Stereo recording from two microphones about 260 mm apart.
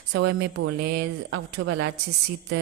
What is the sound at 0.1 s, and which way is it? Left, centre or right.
Mantra, right.